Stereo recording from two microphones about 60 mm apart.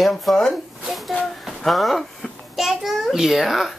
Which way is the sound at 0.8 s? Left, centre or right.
Centre.